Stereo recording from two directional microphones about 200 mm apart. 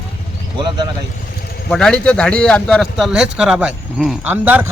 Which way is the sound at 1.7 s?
5° left (ahead or behind).